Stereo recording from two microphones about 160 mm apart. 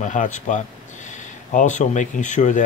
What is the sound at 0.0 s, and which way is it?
Speech, 50° left (ahead or behind).